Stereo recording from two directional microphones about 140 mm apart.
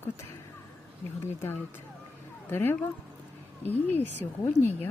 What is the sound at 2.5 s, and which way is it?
Speech, 15° left (ahead or behind).